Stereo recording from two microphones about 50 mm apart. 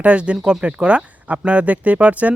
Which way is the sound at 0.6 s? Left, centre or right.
Right.